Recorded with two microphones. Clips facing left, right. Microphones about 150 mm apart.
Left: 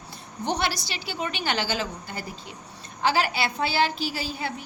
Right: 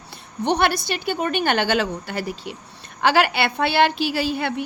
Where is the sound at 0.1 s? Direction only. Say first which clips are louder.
Right 6 dB; 65° right (ahead or behind).